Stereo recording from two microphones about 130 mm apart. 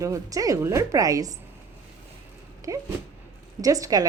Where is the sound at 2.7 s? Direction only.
25° right (ahead or behind).